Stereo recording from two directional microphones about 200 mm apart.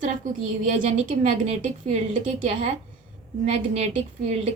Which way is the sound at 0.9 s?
35° right (ahead or behind).